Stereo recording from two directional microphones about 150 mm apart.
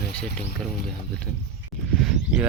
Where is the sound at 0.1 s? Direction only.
5° left (ahead or behind).